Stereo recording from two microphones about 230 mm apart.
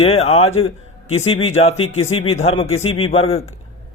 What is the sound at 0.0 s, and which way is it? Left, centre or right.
A man's voice, left.